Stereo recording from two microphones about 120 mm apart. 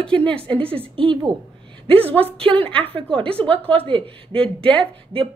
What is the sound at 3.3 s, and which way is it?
Speech, 10° left (ahead or behind).